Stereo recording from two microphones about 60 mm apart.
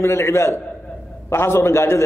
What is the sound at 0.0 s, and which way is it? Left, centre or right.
A man's voice, left.